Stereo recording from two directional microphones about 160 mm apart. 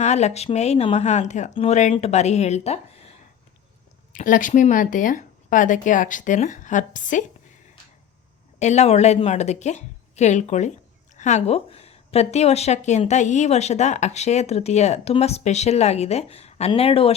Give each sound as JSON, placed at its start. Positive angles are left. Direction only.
{"t": 0.0, "sound": "speech", "side_deg": 45}
{"t": 4.1, "sound": "speech", "side_deg": 55}
{"t": 8.5, "sound": "speech", "side_deg": 45}